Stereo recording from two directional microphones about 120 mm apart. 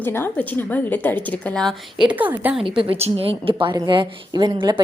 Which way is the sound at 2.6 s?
45° right (ahead or behind).